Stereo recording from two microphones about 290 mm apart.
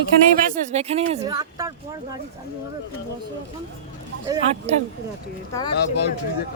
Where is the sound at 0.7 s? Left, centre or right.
Right.